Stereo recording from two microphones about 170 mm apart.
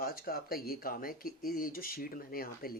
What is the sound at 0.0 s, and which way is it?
Speech, 60° left (ahead or behind).